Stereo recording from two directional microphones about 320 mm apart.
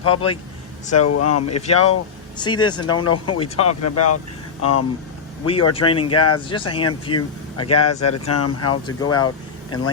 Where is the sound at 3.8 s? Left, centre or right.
Left.